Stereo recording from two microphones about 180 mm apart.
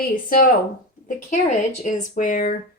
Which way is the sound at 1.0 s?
40° left (ahead or behind).